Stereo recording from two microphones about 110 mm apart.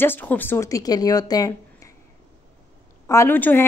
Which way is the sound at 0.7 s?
35° left (ahead or behind).